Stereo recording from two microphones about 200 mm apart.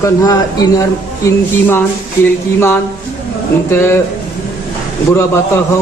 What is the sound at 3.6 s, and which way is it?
Speech, 10° left (ahead or behind).